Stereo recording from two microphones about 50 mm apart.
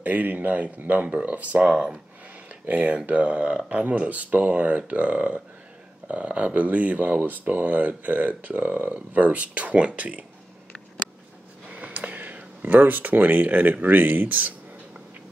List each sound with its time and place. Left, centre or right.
0.0 s speech: right
1.7 s speech: centre
2.6 s speech: right
11.7 s speech: right